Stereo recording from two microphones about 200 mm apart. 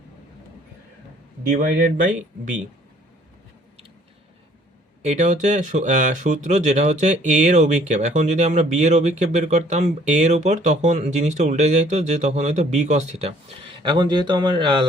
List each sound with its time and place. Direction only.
1.5 s speech: 45° right (ahead or behind)
5.0 s speech: 35° right (ahead or behind)